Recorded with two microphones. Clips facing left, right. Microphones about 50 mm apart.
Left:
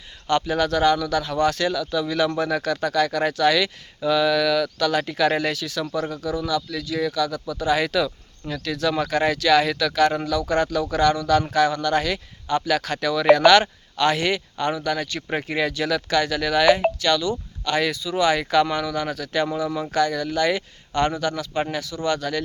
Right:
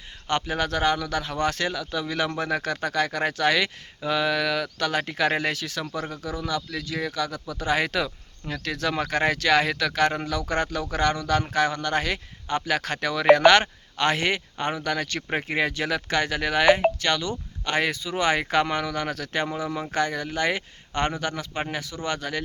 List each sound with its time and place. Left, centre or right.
0.3 s speech: right
15.3 s speech: right
19.5 s speech: right